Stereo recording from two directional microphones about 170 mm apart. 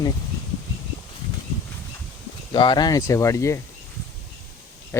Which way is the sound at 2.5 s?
25° left (ahead or behind).